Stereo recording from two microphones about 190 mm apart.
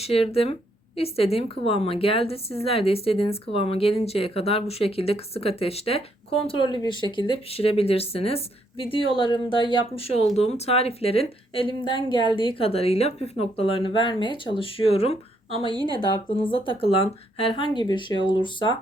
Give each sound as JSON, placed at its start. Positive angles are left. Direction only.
{"t": 0.0, "sound": "a woman's voice", "side_deg": 30}